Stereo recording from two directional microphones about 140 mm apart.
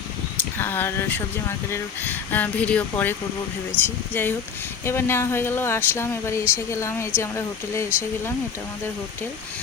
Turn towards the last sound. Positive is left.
turn(degrees=20)  # may be behind; listen again after turning